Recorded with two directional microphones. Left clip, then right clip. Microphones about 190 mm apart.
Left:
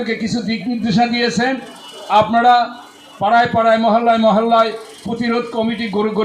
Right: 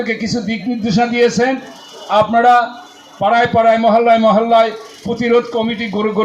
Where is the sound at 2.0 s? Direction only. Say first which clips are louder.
Right 1 dB; 25° right (ahead or behind).